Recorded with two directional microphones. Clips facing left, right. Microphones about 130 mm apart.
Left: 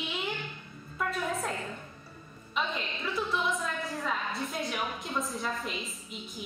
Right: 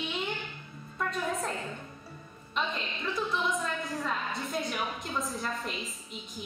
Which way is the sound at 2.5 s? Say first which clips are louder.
Even; centre (ahead or behind).